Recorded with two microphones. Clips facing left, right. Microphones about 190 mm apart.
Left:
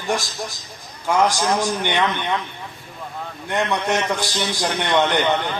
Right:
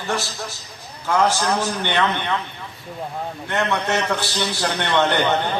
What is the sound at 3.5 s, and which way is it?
A man's voice, 15° left (ahead or behind).